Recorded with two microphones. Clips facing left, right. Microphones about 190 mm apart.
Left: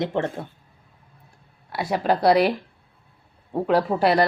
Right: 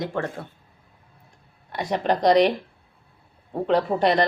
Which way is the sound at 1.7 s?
10° left (ahead or behind).